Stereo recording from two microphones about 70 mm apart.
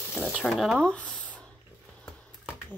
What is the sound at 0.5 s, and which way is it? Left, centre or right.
Speech, centre.